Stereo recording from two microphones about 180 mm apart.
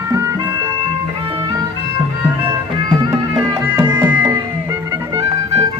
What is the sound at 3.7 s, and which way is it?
Music, 20° right (ahead or behind).